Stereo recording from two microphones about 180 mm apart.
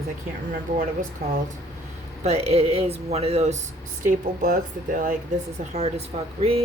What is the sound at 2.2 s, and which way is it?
Speech, 35° right (ahead or behind).